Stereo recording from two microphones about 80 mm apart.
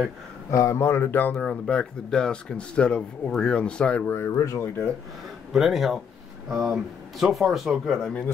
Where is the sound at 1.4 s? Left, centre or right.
Centre.